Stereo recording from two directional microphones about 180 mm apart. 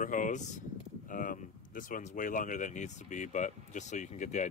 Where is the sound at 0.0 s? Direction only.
45° left (ahead or behind).